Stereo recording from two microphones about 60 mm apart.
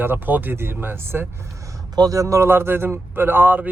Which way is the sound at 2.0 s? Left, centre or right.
Right.